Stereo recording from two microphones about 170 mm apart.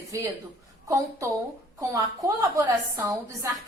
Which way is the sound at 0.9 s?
20° right (ahead or behind).